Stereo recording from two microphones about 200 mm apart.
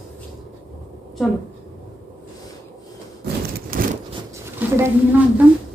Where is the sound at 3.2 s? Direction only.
45° right (ahead or behind).